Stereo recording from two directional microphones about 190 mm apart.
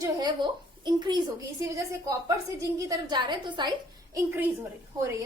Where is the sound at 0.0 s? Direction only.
20° right (ahead or behind).